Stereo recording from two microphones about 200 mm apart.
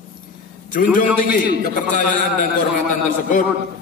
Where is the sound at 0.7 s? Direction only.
40° left (ahead or behind).